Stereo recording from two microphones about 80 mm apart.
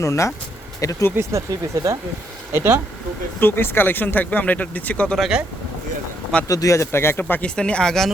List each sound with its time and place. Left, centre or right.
0.0 s speech: left
1.2 s speech: right
3.4 s speech: left
6.5 s speech: left
7.4 s speech: centre